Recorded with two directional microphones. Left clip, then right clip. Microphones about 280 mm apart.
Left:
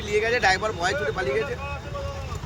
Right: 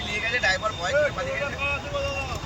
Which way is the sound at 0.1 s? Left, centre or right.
Centre.